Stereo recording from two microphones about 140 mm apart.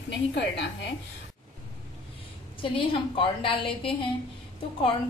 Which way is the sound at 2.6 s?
40° left (ahead or behind).